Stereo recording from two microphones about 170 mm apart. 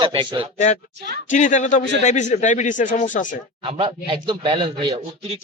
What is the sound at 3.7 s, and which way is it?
Speech, 35° right (ahead or behind).